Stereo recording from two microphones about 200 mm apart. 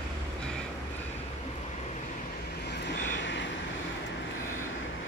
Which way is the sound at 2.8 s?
60° left (ahead or behind).